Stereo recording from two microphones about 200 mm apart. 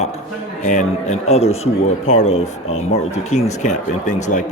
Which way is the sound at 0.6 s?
35° left (ahead or behind).